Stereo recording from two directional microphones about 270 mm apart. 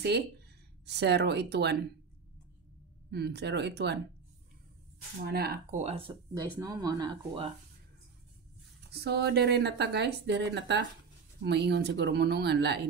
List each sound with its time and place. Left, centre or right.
0.8 s speech: right
3.1 s speech: right
5.2 s speech: right; by 7.5 s centre
8.9 s speech: right